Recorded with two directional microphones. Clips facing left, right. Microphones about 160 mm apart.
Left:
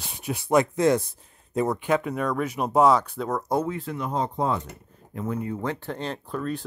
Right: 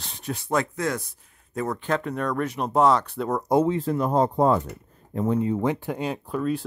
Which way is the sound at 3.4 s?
20° right (ahead or behind).